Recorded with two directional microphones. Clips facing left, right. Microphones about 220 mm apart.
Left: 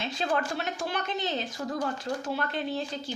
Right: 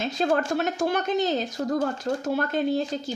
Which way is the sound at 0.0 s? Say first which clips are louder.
Right 6 dB; 45° right (ahead or behind).